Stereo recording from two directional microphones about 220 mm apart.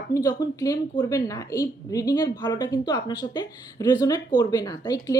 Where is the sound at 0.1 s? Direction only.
15° left (ahead or behind).